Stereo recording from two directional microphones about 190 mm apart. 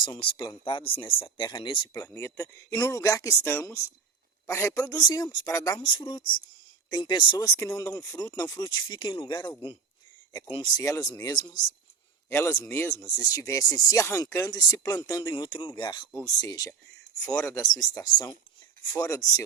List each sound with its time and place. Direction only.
0.0 s speech: 25° left (ahead or behind)